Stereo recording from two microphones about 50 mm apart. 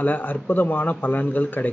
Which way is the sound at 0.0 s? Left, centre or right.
Left.